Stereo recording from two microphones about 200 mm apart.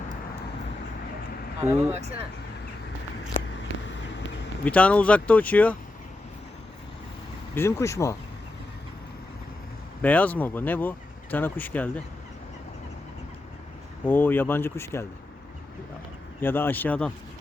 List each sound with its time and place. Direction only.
1.8 s speech: 30° right (ahead or behind)
3.8 s vehicle: 65° left (ahead or behind)
4.6 s speech: 5° left (ahead or behind)
7.5 s speech: 15° left (ahead or behind)
10.0 s speech: 10° left (ahead or behind)
14.0 s speech: 10° left (ahead or behind)
16.4 s speech: 10° left (ahead or behind)